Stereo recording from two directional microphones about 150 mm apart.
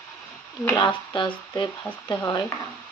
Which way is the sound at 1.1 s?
30° left (ahead or behind).